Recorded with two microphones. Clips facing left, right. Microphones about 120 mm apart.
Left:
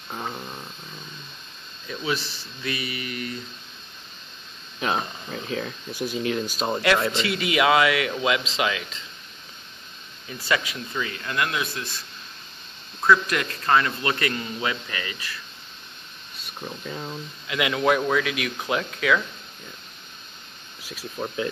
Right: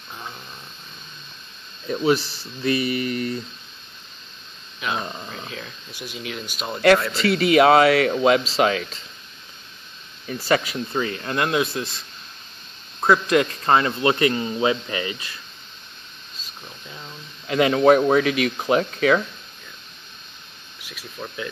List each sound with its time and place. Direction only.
0.1 s speech: 40° left (ahead or behind)
1.9 s speech: 35° right (ahead or behind)
4.7 s a sound: 35° left (ahead or behind)
5.0 s a sound: 40° right (ahead or behind)
5.5 s speech: 45° left (ahead or behind)
7.2 s speech: 40° right (ahead or behind)
10.2 s speech: 40° right (ahead or behind)
13.0 s a man's voice: 25° right (ahead or behind)
17.5 s speech: 35° right (ahead or behind)
21.2 s speech: 10° left (ahead or behind)